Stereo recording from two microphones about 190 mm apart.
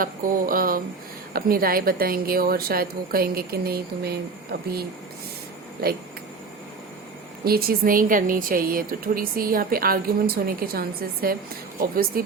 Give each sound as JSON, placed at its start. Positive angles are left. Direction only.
{"t": 0.0, "sound": "speech", "side_deg": -50}
{"t": 7.4, "sound": "speech", "side_deg": -50}